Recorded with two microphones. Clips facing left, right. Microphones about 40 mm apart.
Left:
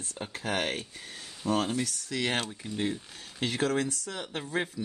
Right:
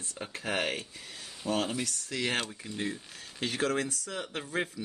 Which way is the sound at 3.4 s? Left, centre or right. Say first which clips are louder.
Left 2 dB; left.